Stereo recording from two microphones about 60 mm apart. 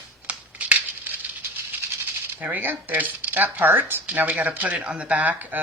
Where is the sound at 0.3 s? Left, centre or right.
Right.